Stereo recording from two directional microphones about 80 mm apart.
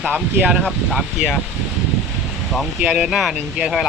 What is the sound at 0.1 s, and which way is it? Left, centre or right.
Speech, right.